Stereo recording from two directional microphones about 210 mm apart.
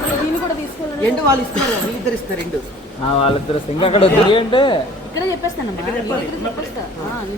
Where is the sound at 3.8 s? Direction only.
25° left (ahead or behind).